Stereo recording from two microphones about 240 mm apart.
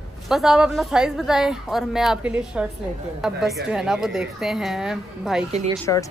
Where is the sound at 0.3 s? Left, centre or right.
Centre.